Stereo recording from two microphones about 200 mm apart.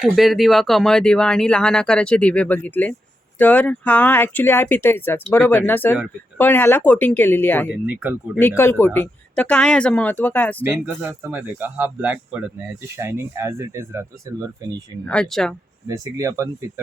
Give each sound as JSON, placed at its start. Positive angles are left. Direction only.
{"t": 0.0, "sound": "speech", "side_deg": 0}
{"t": 10.6, "sound": "speech", "side_deg": -10}
{"t": 15.0, "sound": "speech", "side_deg": 5}
{"t": 15.9, "sound": "speech", "side_deg": -15}